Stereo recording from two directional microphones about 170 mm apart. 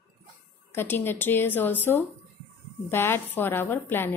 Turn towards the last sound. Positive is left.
turn(degrees=15)  # may be behind; listen again after turning